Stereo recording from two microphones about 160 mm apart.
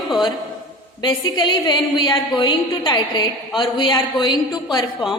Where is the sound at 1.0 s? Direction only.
25° left (ahead or behind).